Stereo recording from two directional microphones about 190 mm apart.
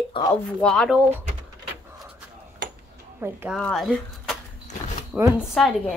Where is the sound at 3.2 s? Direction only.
10° right (ahead or behind).